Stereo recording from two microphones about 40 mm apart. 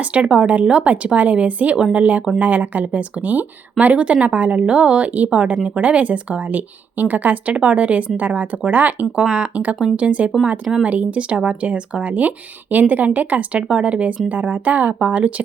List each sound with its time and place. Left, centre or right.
0.0 s speech: right
3.9 s speech: right